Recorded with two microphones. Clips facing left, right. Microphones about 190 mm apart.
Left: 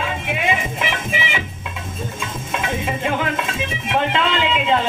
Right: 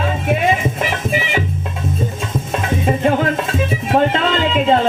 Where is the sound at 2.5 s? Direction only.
40° right (ahead or behind).